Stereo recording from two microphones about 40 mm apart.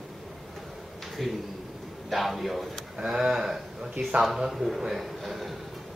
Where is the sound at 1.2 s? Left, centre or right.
Centre.